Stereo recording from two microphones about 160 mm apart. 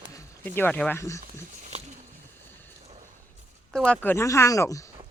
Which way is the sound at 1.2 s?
45° right (ahead or behind).